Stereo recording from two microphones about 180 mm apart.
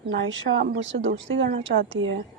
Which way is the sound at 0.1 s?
85° right.